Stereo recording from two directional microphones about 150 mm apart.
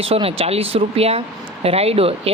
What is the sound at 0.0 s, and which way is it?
Speech, 40° right (ahead or behind).